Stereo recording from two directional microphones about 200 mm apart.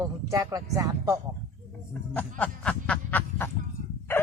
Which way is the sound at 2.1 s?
5° left (ahead or behind).